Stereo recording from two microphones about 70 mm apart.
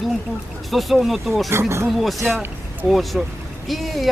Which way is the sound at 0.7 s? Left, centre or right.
Centre.